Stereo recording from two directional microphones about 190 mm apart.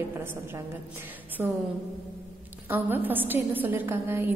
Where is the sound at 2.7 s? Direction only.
10° right (ahead or behind).